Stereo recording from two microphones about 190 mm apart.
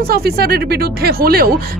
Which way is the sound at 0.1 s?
55° right (ahead or behind).